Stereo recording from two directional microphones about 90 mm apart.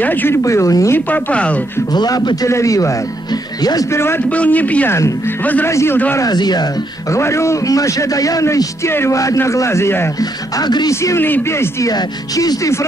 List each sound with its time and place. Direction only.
0.0 s speech: 20° left (ahead or behind)
0.4 s a man's voice: 35° left (ahead or behind)
0.9 s speech: 15° left (ahead or behind)
2.0 s a man's voice: 50° left (ahead or behind)
3.9 s speech: 30° left (ahead or behind)
4.3 s speech: 15° left (ahead or behind)
5.7 s a man's voice: 30° left (ahead or behind)
6.1 s a man's voice: 50° left (ahead or behind)
7.1 s a man's voice: 30° left (ahead or behind)
10.6 s a man's voice: 50° left (ahead or behind)
10.9 s a man's voice: 35° left (ahead or behind)
11.2 s speech: 20° left (ahead or behind)
11.8 s a man's voice: 45° left (ahead or behind)